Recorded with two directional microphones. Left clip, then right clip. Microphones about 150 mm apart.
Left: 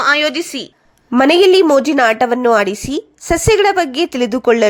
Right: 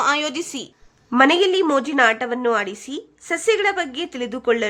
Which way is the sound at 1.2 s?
35° left (ahead or behind).